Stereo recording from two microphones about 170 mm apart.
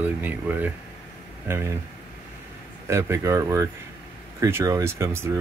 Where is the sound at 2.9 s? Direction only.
15° right (ahead or behind).